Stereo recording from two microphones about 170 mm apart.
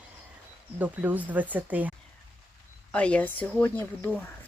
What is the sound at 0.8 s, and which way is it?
Speech, 10° right (ahead or behind).